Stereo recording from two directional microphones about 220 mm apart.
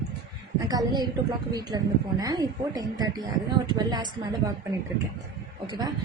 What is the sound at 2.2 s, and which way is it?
A woman's voice, 15° right (ahead or behind).